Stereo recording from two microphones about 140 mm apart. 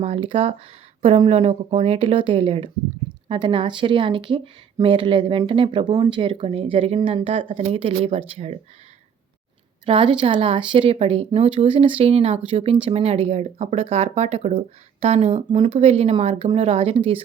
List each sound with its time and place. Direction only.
0.0 s speech: 40° right (ahead or behind)
9.8 s speech: 40° right (ahead or behind)